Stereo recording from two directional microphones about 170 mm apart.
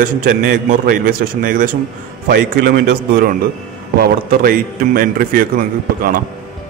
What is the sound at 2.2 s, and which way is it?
A man's voice, 70° right (ahead or behind).